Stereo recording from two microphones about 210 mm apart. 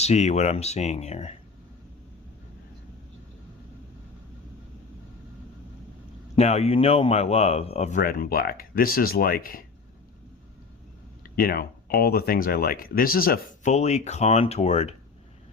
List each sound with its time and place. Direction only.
0.0 s speech: 30° left (ahead or behind)
6.3 s speech: 30° left (ahead or behind)
8.0 s speech: 40° left (ahead or behind)
11.2 s speech: 45° left (ahead or behind)